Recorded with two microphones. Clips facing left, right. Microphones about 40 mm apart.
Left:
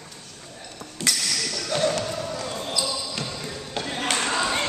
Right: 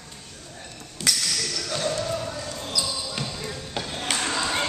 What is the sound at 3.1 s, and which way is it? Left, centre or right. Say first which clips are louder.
Basketball bounce: even; centre.